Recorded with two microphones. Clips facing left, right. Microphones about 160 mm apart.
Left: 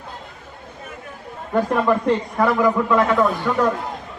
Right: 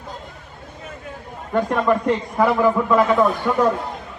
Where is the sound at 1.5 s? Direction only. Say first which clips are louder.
Even; 5° left (ahead or behind).